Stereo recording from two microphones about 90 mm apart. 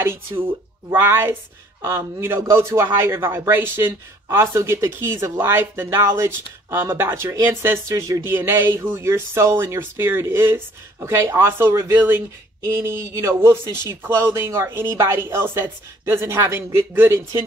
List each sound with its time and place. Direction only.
0.0 s speech: 25° right (ahead or behind)